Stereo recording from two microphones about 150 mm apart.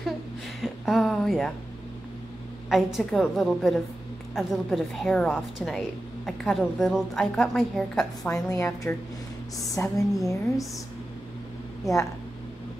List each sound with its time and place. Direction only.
0.6 s speech: centre (ahead or behind)
2.7 s a woman's voice: centre (ahead or behind)
8.2 s a woman's voice: 20° left (ahead or behind)
9.8 s a woman's voice: 20° left (ahead or behind)